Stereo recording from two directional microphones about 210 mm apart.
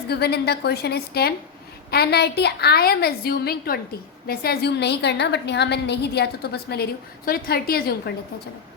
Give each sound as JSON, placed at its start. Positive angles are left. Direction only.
{"t": 0.1, "sound": "a woman's voice", "side_deg": 50}